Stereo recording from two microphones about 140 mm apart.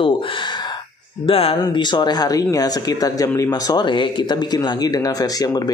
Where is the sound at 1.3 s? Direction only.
40° left (ahead or behind).